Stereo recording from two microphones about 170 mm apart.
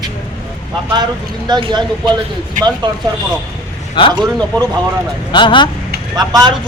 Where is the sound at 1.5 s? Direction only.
25° right (ahead or behind).